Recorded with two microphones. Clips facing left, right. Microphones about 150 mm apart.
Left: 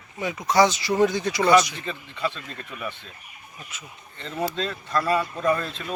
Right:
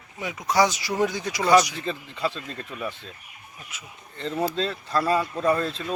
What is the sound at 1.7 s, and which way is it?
Speech, 35° right (ahead or behind).